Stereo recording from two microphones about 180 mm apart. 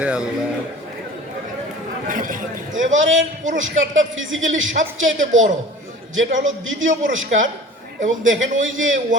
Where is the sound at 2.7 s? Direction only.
90° right.